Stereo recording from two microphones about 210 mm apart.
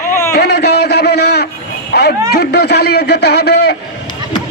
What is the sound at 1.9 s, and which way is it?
A man's voice, 50° left (ahead or behind).